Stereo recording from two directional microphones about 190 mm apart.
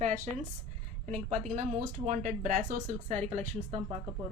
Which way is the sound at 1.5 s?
40° right (ahead or behind).